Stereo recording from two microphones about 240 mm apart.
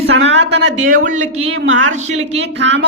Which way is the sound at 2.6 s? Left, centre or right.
Right.